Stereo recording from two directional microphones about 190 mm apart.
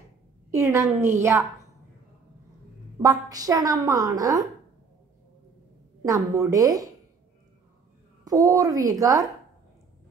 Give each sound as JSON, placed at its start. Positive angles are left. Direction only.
{"t": 0.5, "sound": "a woman's voice", "side_deg": -15}
{"t": 3.0, "sound": "a woman's voice", "side_deg": -20}
{"t": 6.0, "sound": "a woman's voice", "side_deg": -15}
{"t": 8.2, "sound": "a woman's voice", "side_deg": -20}